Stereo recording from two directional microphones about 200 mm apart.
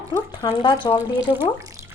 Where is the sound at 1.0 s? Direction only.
10° right (ahead or behind).